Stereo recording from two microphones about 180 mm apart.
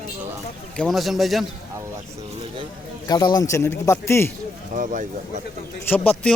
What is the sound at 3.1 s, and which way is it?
A man's voice, 20° left (ahead or behind).